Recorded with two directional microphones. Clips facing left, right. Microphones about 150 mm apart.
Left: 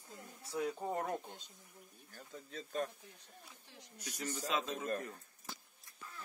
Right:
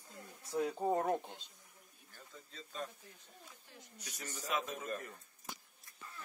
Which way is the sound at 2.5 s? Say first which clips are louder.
Left 6 dB; 60° left (ahead or behind).